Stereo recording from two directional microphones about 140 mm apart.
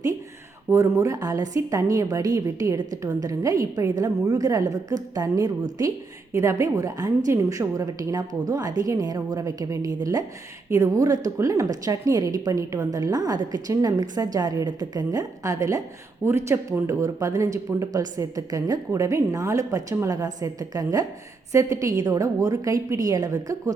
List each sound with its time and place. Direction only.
0.7 s a woman's voice: 20° right (ahead or behind)